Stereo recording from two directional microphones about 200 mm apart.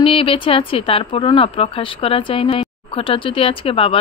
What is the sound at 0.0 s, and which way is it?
Speech, 25° left (ahead or behind).